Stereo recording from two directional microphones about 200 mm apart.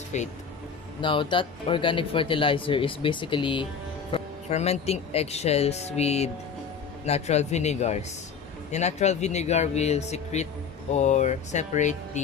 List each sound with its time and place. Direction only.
0.1 s speech: 35° left (ahead or behind)
1.0 s speech: 25° left (ahead or behind)